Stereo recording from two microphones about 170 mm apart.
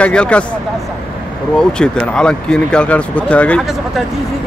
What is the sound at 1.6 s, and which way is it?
Speech, 5° left (ahead or behind).